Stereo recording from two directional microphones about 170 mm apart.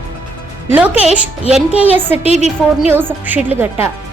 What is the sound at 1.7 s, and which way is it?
Speech, 35° left (ahead or behind).